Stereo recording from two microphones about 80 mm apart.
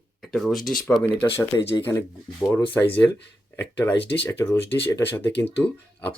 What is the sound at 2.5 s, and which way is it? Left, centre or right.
Speech, left.